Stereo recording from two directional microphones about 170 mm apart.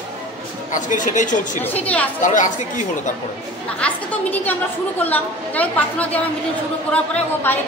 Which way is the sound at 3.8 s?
10° left (ahead or behind).